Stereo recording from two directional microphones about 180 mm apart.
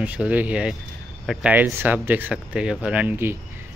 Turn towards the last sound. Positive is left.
turn(degrees=-10)  # may be behind; listen again after turning